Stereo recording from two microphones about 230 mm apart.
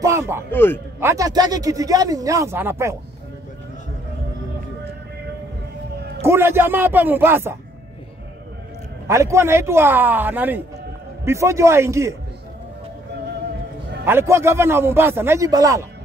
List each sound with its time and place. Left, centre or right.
0.0 s a sound: centre
0.5 s a man's voice: centre
0.9 s a man's voice: centre
5.9 s a sound: right
6.2 s a man's voice: centre
9.0 s a man's voice: centre
14.0 s a man's voice: centre